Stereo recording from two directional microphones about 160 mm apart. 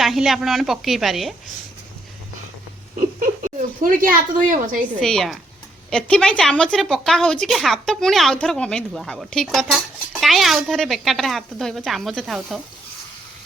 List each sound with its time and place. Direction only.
0.0 s a woman's voice: centre (ahead or behind)
3.2 s speech: 60° right (ahead or behind)
4.9 s a woman's voice: 5° left (ahead or behind)